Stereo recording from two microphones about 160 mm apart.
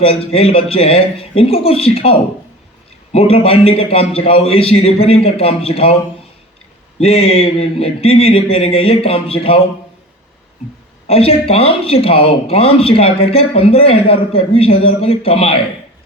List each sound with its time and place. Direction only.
0.0 s speech: 35° left (ahead or behind)
7.0 s speech: 40° left (ahead or behind)
11.1 s speech: 40° left (ahead or behind)